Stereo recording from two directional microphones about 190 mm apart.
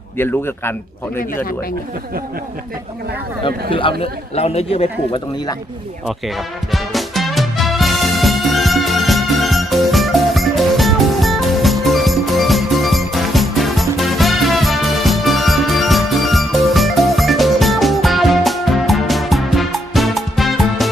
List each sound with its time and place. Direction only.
0.2 s a man's voice: 10° left (ahead or behind)
3.4 s speech: 25° left (ahead or behind)
6.1 s music: centre (ahead or behind)